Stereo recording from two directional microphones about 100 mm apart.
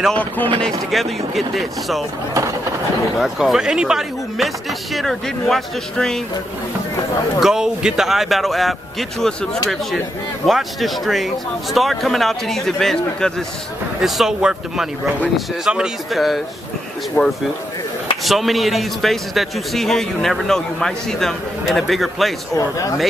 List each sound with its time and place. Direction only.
0.1 s speech: 15° left (ahead or behind)
0.6 s a man's voice: 5° left (ahead or behind)
3.2 s a man's voice: 5° right (ahead or behind)
7.3 s a man's voice: 5° right (ahead or behind)
10.4 s a man's voice: centre (ahead or behind)
17.2 s speech: 20° left (ahead or behind)
18.2 s a man's voice: centre (ahead or behind)
22.6 s speech: 30° left (ahead or behind)